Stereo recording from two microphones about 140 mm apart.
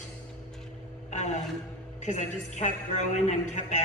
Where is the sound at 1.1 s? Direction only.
55° left (ahead or behind).